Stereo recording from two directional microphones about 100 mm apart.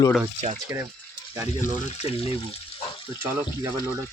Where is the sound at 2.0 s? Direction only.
80° left.